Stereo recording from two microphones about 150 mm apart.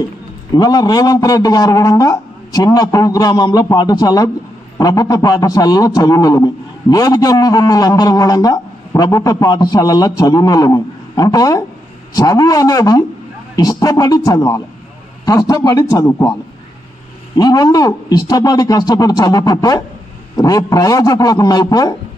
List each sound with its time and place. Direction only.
0.6 s a man's voice: 25° left (ahead or behind)
17.4 s a man's voice: 25° left (ahead or behind)